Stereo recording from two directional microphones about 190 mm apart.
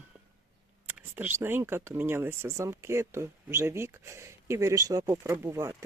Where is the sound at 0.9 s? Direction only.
10° right (ahead or behind).